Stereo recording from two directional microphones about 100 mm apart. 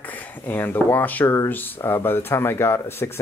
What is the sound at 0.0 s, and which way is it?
Speech, 15° left (ahead or behind).